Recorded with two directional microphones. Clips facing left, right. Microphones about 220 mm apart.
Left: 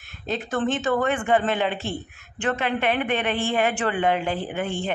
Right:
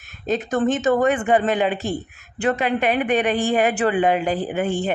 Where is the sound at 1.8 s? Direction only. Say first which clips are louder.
Right 5 dB; 40° right (ahead or behind).